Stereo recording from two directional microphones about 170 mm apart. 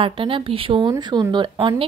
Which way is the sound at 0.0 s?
30° right (ahead or behind).